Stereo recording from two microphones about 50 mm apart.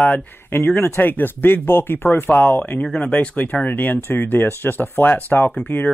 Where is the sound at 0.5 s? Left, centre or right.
Left.